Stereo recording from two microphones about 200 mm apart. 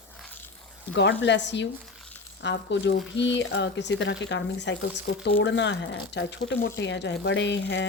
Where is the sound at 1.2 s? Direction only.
60° left (ahead or behind).